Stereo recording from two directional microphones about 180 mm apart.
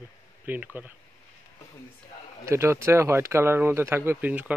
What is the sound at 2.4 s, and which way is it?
Speech, 15° right (ahead or behind).